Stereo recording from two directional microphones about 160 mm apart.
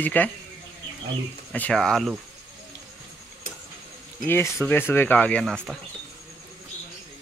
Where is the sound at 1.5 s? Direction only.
5° left (ahead or behind).